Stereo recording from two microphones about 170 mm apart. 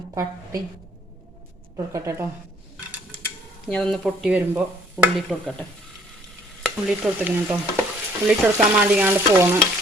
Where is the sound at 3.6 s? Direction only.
5° left (ahead or behind).